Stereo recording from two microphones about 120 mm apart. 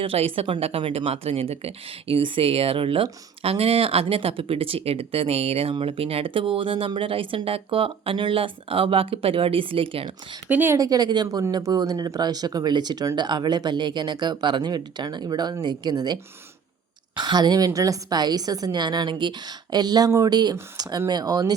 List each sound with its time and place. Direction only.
0.0 s speech: 55° right (ahead or behind)
10.5 s speech: 15° right (ahead or behind)
10.8 s speech: 30° right (ahead or behind)
17.2 s speech: 35° right (ahead or behind)